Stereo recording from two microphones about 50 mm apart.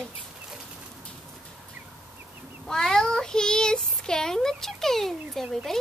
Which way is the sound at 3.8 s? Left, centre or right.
Centre.